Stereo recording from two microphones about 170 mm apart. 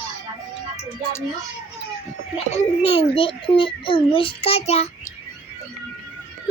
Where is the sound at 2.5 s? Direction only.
40° left (ahead or behind).